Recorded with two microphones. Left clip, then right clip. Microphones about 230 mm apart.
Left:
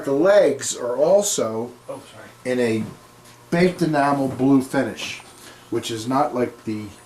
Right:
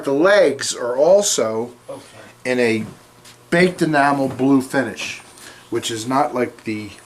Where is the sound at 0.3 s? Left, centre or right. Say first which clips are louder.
Right 1 dB; centre.